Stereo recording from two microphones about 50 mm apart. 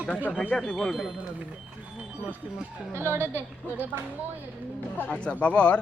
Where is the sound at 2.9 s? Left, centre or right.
Right.